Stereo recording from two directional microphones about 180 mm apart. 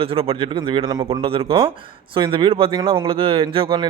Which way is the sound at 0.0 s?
30° right (ahead or behind).